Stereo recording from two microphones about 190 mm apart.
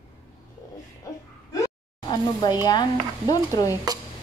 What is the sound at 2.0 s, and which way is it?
Speech, 20° left (ahead or behind).